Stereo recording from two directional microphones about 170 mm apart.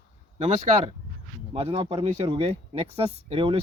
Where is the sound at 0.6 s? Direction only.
45° right (ahead or behind).